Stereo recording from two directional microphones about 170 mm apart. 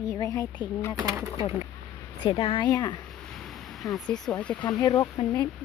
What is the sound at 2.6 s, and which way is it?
Speech, 20° left (ahead or behind).